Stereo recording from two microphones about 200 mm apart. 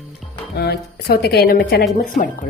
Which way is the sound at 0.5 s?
50° left (ahead or behind).